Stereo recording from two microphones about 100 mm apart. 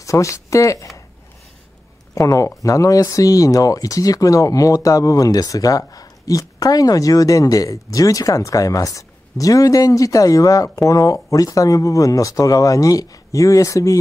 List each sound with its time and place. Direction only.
0.0 s speech: 30° left (ahead or behind)
2.1 s speech: 35° left (ahead or behind)